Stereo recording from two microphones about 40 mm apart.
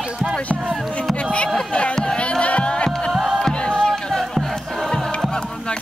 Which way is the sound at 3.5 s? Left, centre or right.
Left.